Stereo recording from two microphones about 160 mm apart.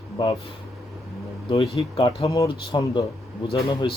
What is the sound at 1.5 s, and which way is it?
Speech, 35° left (ahead or behind).